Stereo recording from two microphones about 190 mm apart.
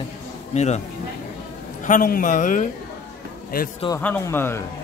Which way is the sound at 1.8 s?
45° left (ahead or behind).